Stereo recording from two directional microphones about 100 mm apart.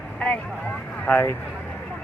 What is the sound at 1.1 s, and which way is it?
Speech, 20° left (ahead or behind).